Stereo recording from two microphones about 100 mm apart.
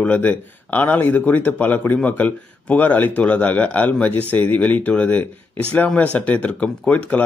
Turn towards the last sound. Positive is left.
turn(degrees=15)  # may be behind; listen again after turning